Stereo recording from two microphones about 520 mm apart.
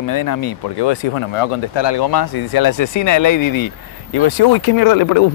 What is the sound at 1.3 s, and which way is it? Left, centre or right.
Speech, left.